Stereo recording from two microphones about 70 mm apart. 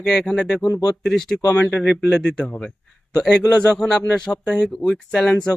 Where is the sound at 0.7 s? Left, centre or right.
Left.